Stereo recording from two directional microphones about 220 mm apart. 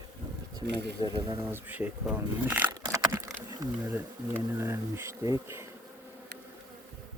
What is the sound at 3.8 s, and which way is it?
Bee, 10° right (ahead or behind).